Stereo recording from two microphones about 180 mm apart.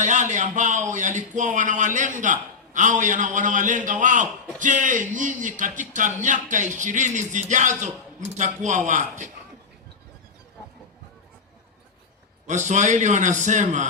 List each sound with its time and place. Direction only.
0.0 s a man's voice: 40° right (ahead or behind)
12.5 s a man's voice: 40° right (ahead or behind)